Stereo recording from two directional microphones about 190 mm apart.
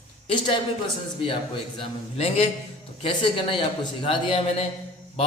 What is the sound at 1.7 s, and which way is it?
A man's voice, 30° left (ahead or behind).